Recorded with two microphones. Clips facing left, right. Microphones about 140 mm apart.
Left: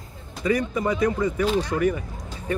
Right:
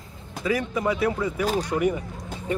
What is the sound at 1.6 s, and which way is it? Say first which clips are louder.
Speech: left 1 dB; 15° right (ahead or behind).